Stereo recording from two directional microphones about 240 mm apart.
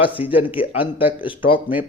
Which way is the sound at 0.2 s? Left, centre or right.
Left.